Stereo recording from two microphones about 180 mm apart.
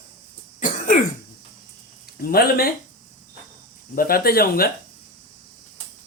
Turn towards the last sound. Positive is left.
turn(degrees=55)  # may be behind; listen again after turning